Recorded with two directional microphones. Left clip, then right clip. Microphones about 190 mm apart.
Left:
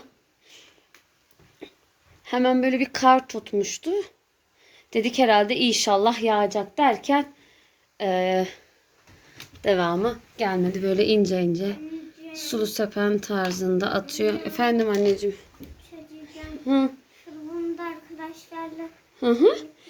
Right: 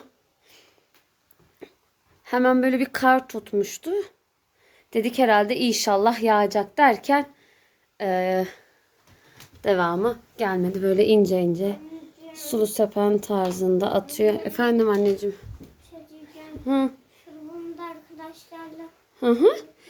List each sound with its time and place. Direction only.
2.2 s a woman's voice: 15° right (ahead or behind)
16.3 s child singing: 10° right (ahead or behind)
19.2 s speech: 10° right (ahead or behind)